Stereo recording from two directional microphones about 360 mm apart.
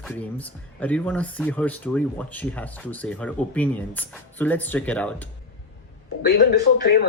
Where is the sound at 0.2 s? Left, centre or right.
Centre.